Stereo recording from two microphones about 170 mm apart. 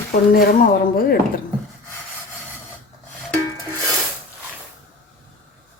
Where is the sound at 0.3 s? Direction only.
55° left (ahead or behind).